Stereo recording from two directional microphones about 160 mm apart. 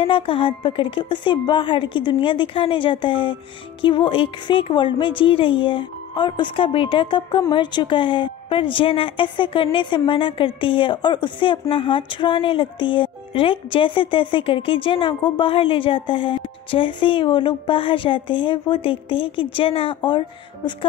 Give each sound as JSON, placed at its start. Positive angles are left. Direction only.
{"t": 0.0, "sound": "speech", "side_deg": 35}